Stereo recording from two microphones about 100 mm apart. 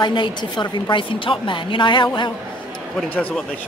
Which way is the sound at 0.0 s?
55° left (ahead or behind).